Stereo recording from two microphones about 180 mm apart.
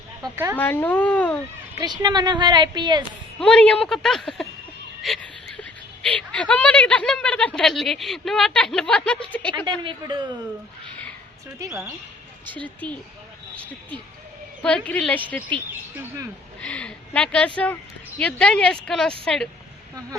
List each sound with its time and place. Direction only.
0.5 s speech: 10° left (ahead or behind)
1.8 s a woman's voice: 20° right (ahead or behind)
3.4 s speech: 5° left (ahead or behind)
9.5 s a woman's voice: 25° right (ahead or behind)
12.5 s speech: 10° left (ahead or behind)
14.6 s speech: 5° left (ahead or behind)
16.6 s speech: 5° left (ahead or behind)